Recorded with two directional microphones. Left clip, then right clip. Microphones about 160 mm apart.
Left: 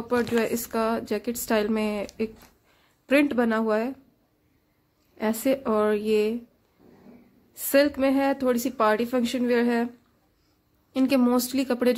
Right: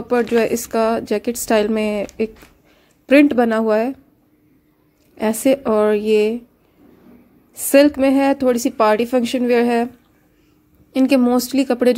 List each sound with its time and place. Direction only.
0.3 s speech: 20° right (ahead or behind)
3.1 s speech: 20° right (ahead or behind)
5.1 s speech: 25° right (ahead or behind)
7.6 s speech: 20° right (ahead or behind)
10.9 s speech: 20° right (ahead or behind)